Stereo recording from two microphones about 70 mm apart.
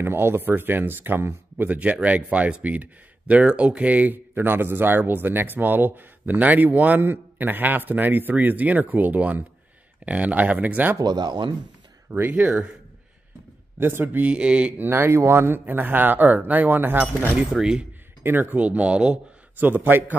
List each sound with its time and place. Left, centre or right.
0.0 s speech: right
11.1 s speech: right
12.1 s speech: right
13.7 s speech: right
14.8 s speech: right
17.6 s speech: centre
18.2 s speech: right
19.6 s speech: right